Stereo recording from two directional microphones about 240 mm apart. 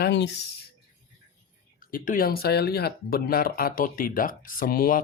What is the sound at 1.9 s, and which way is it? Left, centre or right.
Speech, left.